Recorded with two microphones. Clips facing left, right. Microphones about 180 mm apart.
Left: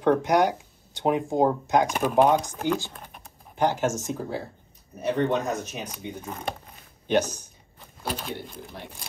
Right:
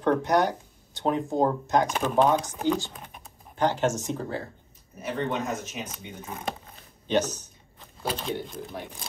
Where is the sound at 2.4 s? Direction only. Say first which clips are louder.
Right 1 dB; 15° right (ahead or behind).